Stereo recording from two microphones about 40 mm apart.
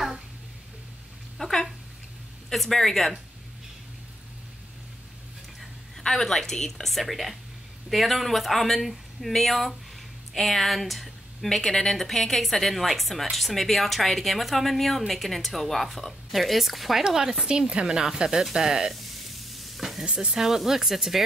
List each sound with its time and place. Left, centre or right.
1.4 s a sound: centre
2.5 s a woman's voice: centre
6.0 s a woman's voice: centre
11.4 s a woman's voice: centre
17.0 s speech: centre
17.5 s speech: right
19.0 s sizzle: centre
20.1 s speech: centre